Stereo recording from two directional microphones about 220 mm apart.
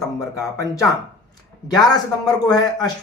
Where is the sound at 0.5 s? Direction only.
15° left (ahead or behind).